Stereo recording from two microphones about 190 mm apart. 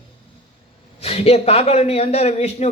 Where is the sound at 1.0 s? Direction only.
35° left (ahead or behind).